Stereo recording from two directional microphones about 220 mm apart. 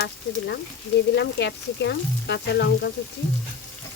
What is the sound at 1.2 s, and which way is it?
Speech, 50° left (ahead or behind).